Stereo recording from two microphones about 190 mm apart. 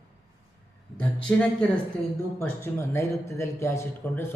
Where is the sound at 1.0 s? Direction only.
5° left (ahead or behind).